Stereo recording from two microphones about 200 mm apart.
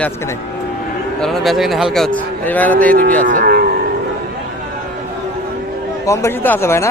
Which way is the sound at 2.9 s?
45° right (ahead or behind).